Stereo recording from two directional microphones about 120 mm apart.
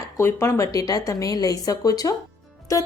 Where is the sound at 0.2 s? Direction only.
20° left (ahead or behind).